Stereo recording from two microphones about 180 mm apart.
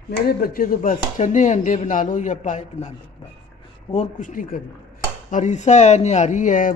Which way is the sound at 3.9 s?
45° left (ahead or behind).